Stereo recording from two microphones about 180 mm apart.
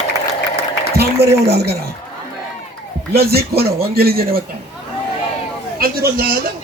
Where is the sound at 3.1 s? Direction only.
60° right (ahead or behind).